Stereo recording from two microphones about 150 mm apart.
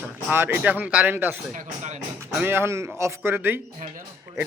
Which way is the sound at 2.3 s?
15° right (ahead or behind).